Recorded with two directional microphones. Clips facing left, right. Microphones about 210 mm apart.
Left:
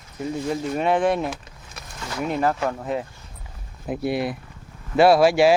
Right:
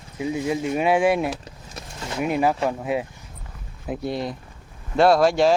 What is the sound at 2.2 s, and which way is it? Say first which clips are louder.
Speech: right 1 dB; 10° right (ahead or behind).